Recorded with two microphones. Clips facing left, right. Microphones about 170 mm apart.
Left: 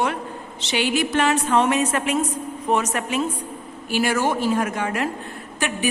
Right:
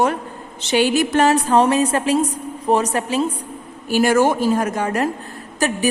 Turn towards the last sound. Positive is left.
turn(degrees=-40)  # may be behind; listen again after turning